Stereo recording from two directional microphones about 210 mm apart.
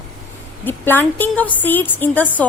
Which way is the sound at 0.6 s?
10° left (ahead or behind).